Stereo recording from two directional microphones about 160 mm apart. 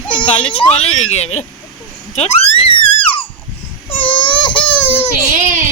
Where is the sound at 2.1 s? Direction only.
40° left (ahead or behind).